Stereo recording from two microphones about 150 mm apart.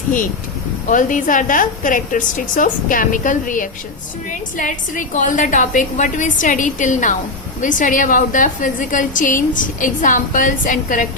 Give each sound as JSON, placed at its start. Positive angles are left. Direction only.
{"t": 0.9, "sound": "a woman's voice", "side_deg": 60}